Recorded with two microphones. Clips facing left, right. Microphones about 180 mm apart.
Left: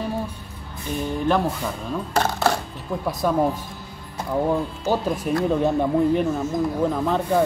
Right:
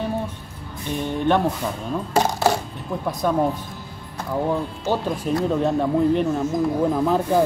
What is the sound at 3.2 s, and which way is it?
Speech, 5° left (ahead or behind).